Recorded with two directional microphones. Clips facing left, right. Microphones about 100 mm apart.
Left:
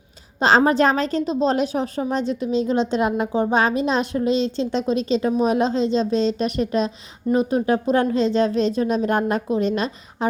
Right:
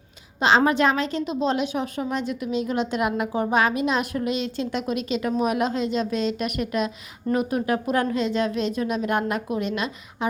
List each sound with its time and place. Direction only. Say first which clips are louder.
0.3 s a woman's voice: left 3 dB; 35° left (ahead or behind)